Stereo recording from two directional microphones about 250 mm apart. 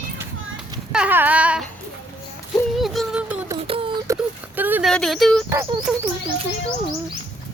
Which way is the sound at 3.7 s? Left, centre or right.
Right.